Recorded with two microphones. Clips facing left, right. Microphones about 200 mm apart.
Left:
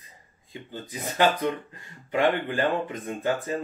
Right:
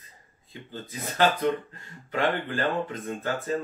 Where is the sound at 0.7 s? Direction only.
15° left (ahead or behind).